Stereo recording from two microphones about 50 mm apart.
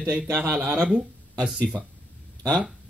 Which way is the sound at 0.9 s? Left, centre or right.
Centre.